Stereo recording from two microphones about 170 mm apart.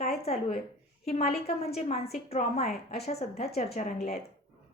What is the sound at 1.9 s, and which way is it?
A woman's voice, 40° left (ahead or behind).